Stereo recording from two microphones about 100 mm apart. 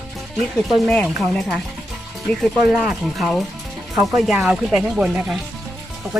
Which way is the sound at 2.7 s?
5° right (ahead or behind).